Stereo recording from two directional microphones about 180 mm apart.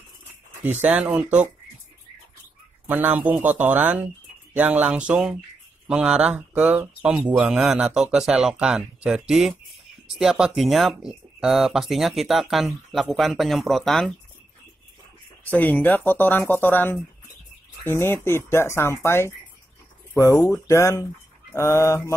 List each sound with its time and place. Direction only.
0.7 s speech: 10° right (ahead or behind)
2.9 s speech: 10° right (ahead or behind)
15.5 s speech: 10° left (ahead or behind)
20.6 s speech: 15° left (ahead or behind)